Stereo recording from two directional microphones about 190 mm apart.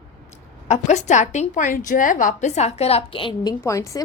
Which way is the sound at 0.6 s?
35° left (ahead or behind).